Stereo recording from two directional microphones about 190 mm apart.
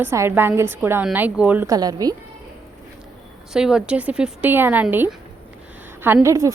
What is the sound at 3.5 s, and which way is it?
A woman's voice, 5° right (ahead or behind).